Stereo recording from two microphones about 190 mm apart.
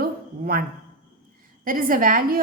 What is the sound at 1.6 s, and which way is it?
Speech, 45° right (ahead or behind).